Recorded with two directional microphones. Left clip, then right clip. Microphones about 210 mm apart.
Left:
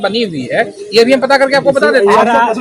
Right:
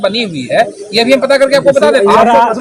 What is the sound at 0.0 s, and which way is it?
Speech, 10° left (ahead or behind).